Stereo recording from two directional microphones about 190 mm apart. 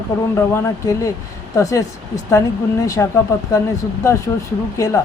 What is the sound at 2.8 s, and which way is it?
Speech, 20° left (ahead or behind).